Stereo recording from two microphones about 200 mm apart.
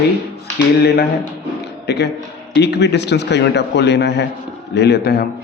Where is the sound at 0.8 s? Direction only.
50° left (ahead or behind).